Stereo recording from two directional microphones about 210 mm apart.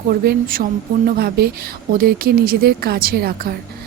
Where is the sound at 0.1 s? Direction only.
45° right (ahead or behind).